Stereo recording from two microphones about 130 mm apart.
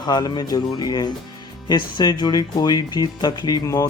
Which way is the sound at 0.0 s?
30° left (ahead or behind).